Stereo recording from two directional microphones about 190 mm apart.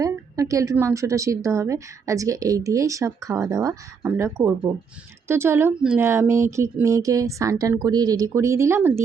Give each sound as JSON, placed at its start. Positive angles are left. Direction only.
{"t": 0.0, "sound": "a woman's voice", "side_deg": -15}